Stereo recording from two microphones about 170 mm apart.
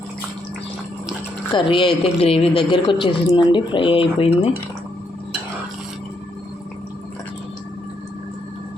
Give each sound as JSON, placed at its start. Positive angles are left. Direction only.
{"t": 1.5, "sound": "speech", "side_deg": 30}